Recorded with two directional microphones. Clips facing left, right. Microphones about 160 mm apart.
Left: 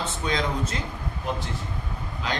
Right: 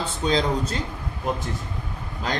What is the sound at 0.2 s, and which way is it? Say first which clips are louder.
Speech: right 5 dB; 30° right (ahead or behind).